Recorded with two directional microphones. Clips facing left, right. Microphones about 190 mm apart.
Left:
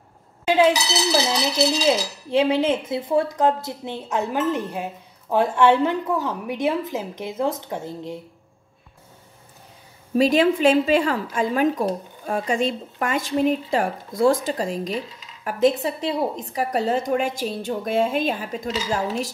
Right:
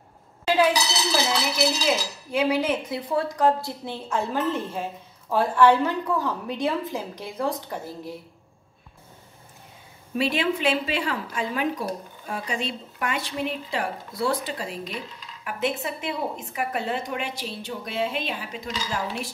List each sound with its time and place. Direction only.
0.5 s speech: 20° left (ahead or behind)
10.1 s a woman's voice: 40° left (ahead or behind)